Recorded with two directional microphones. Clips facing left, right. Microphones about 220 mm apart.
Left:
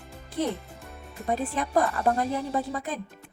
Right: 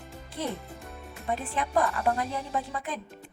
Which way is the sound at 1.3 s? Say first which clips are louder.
Left 3 dB; 40° left (ahead or behind).